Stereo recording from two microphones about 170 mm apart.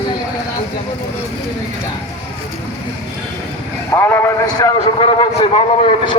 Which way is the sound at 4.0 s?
15° left (ahead or behind).